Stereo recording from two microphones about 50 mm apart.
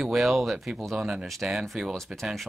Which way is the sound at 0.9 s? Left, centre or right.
Centre.